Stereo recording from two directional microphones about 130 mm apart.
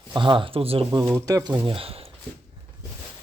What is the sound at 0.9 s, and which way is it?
Speech, 25° right (ahead or behind).